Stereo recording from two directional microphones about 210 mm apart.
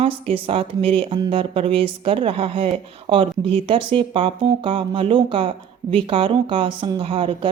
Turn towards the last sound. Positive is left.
turn(degrees=-25)  # may be behind; listen again after turning